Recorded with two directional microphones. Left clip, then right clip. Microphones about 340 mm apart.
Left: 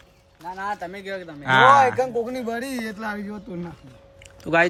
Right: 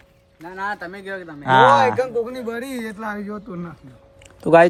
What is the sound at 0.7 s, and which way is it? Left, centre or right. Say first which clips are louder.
Speech: right 1 dB; centre.